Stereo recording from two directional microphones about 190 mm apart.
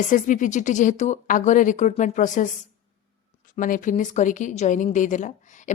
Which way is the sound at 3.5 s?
45° left (ahead or behind).